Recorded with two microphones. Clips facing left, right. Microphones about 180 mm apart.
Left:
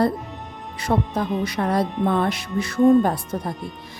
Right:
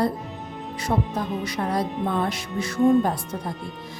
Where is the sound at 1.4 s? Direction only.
60° left (ahead or behind).